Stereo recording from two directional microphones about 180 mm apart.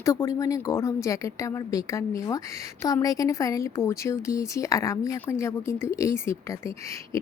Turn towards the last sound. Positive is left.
turn(degrees=15)  # may be behind; listen again after turning